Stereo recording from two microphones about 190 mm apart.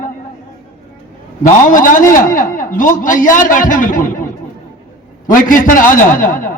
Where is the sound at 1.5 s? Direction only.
45° left (ahead or behind).